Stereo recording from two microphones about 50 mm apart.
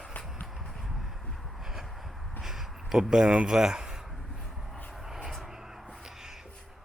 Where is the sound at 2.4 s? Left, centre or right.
Centre.